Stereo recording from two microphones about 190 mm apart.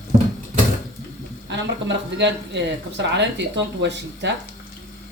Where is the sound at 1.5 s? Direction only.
65° right (ahead or behind).